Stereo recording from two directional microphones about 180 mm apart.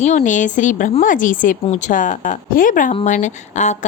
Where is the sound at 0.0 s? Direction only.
40° left (ahead or behind).